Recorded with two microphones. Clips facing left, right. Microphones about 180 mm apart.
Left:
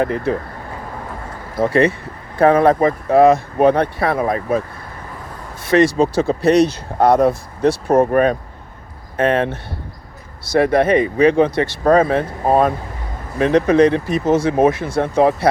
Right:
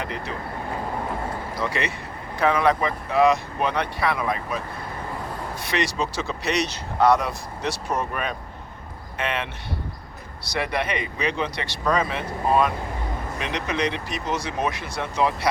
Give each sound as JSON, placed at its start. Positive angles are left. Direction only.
{"t": 0.0, "sound": "speech", "side_deg": 50}
{"t": 1.5, "sound": "speech", "side_deg": 50}
{"t": 5.6, "sound": "speech", "side_deg": 50}